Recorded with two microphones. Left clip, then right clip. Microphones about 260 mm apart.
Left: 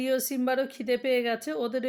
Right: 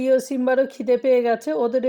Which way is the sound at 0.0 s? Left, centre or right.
Centre.